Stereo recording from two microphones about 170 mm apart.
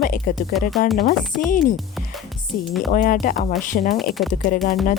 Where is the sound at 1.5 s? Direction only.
55° left (ahead or behind).